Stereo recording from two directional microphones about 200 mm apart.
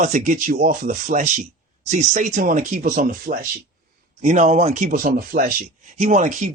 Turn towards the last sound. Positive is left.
turn(degrees=-40)  # may be behind; listen again after turning